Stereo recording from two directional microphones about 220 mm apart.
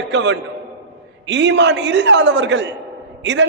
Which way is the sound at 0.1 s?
55° right (ahead or behind).